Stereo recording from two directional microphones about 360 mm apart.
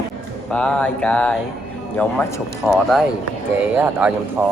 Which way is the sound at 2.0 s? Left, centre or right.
Centre.